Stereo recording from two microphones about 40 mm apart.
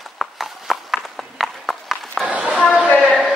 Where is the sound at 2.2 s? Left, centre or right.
Right.